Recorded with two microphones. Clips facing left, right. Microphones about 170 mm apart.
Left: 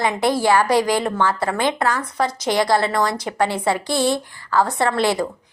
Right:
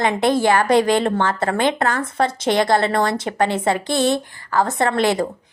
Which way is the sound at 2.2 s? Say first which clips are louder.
Right 1 dB; 25° right (ahead or behind).